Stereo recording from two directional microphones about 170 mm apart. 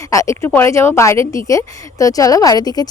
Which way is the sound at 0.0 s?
20° left (ahead or behind).